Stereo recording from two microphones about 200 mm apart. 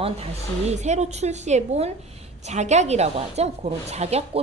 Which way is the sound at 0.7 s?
35° right (ahead or behind).